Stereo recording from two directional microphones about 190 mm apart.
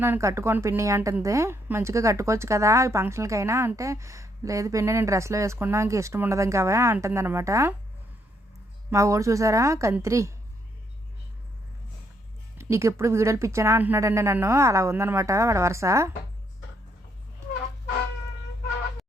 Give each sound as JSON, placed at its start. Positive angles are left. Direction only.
{"t": 0.0, "sound": "speech", "side_deg": -15}
{"t": 8.9, "sound": "speech", "side_deg": -15}
{"t": 12.5, "sound": "speech", "side_deg": -15}